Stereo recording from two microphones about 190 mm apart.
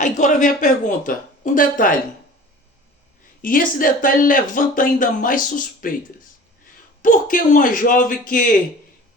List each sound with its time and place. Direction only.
0.0 s speech: 40° left (ahead or behind)
3.4 s speech: 45° left (ahead or behind)
7.0 s speech: 45° left (ahead or behind)